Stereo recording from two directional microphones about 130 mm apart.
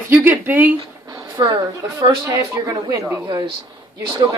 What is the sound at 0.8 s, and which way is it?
Speech, 30° right (ahead or behind).